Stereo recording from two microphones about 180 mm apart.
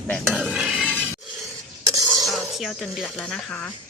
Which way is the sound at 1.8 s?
20° right (ahead or behind).